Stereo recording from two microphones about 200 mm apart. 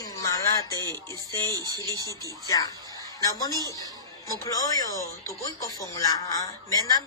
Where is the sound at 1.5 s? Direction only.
20° right (ahead or behind).